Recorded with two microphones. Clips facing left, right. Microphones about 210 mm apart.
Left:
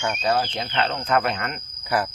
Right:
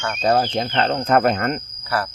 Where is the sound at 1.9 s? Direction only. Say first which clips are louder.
Even; 15° left (ahead or behind).